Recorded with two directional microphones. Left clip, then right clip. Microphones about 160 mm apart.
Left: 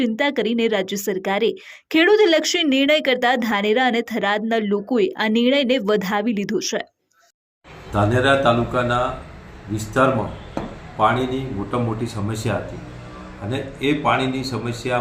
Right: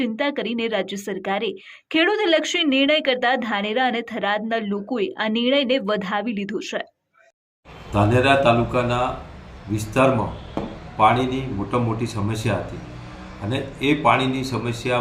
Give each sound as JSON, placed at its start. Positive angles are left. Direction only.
{"t": 0.0, "sound": "a woman's voice", "side_deg": 35}
{"t": 7.9, "sound": "a man's voice", "side_deg": -10}
{"t": 10.5, "sound": "a sound", "side_deg": -10}
{"t": 11.7, "sound": "speech", "side_deg": -5}